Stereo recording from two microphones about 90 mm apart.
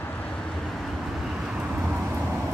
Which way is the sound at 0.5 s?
5° left (ahead or behind).